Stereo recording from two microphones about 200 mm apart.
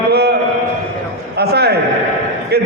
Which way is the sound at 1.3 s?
55° right (ahead or behind).